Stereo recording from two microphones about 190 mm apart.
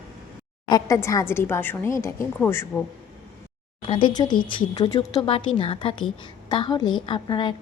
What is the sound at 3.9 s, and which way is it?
Speech, 25° left (ahead or behind).